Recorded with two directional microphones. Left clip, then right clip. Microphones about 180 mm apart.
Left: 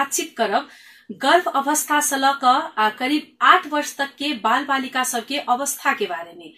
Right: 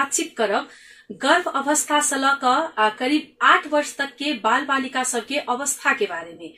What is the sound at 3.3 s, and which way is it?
A woman's voice, 15° left (ahead or behind).